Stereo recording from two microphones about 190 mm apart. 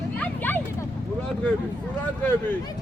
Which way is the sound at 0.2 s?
10° left (ahead or behind).